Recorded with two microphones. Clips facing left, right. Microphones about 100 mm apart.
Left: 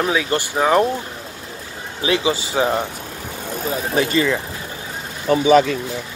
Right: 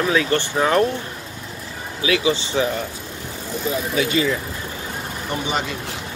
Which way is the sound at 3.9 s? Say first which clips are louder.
Left 3 dB; 40° left (ahead or behind).